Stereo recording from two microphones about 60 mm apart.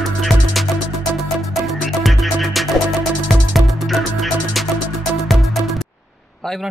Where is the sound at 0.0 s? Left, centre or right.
Centre.